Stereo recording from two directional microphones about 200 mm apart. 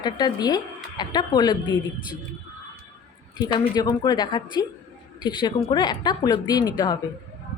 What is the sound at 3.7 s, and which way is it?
Speech, 20° left (ahead or behind).